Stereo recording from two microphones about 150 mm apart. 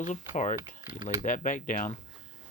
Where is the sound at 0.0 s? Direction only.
55° left (ahead or behind).